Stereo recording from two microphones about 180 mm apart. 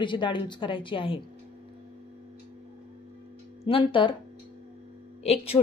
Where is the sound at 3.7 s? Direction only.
30° left (ahead or behind).